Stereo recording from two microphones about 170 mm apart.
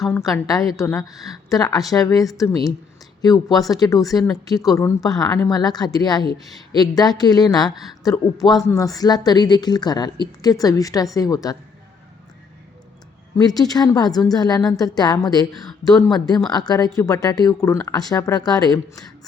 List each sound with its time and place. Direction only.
0.3 s speech: 20° left (ahead or behind)
13.6 s speech: 20° left (ahead or behind)